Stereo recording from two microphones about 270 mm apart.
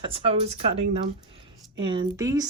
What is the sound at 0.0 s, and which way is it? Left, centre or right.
A woman's voice, right.